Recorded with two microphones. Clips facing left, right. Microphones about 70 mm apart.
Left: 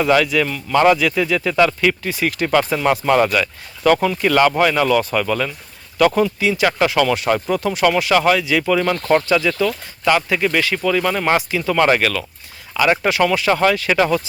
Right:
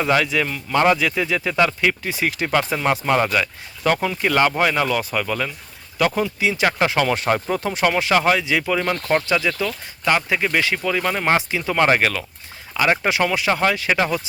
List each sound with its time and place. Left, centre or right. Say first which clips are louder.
0.0 s speech: left 4 dB; right
8.6 s speech: left 4 dB; centre